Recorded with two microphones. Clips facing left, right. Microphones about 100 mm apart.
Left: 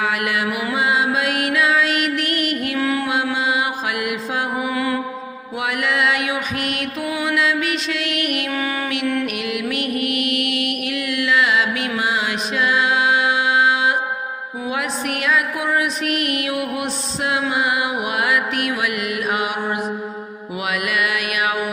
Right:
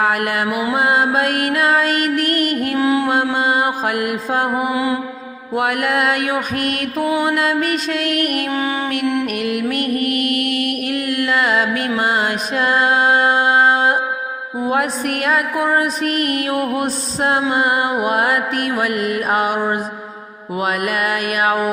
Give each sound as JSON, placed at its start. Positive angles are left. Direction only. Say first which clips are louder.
{"t": 0.0, "sound": "music", "louder": "right 3 dB", "side_deg": -45}
{"t": 2.7, "sound": "mantra", "louder": "right 6 dB", "side_deg": -25}
{"t": 3.3, "sound": "mantra", "louder": "right 4 dB", "side_deg": -45}
{"t": 4.7, "sound": "mantra", "louder": "right 3 dB", "side_deg": -20}
{"t": 5.5, "sound": "mantra", "louder": "right 4 dB", "side_deg": -50}
{"t": 9.2, "sound": "music", "louder": "right 4 dB", "side_deg": -45}
{"t": 14.7, "sound": "mantra", "louder": "right 5 dB", "side_deg": -45}
{"t": 17.5, "sound": "music", "louder": "right 4 dB", "side_deg": -45}